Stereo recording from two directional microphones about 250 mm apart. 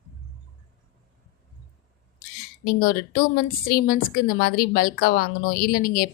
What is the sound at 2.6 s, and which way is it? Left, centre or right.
A woman's voice, left.